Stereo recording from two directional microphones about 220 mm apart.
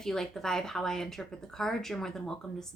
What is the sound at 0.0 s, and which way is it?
A woman's voice, centre (ahead or behind).